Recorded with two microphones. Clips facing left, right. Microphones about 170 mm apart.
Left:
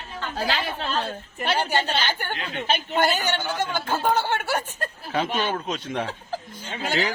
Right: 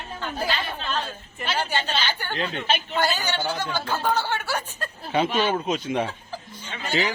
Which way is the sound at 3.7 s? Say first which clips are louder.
Left 3 dB; 20° left (ahead or behind).